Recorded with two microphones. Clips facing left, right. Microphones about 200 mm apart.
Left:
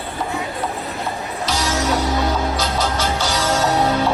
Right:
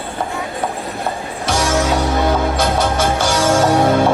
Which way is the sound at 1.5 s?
55° right (ahead or behind).